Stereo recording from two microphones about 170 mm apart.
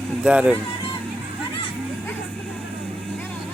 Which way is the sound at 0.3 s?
5° right (ahead or behind).